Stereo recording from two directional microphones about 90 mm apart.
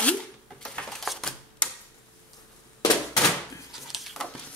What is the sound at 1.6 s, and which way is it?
Tick-tock, 15° left (ahead or behind).